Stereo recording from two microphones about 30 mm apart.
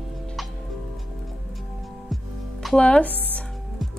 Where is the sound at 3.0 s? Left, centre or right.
Left.